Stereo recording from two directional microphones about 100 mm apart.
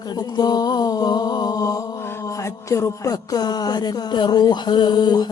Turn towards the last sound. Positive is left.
turn(degrees=45)  # may be behind; listen again after turning